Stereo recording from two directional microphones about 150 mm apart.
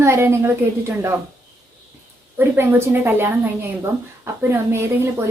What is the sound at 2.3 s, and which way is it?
A woman's voice, 15° right (ahead or behind).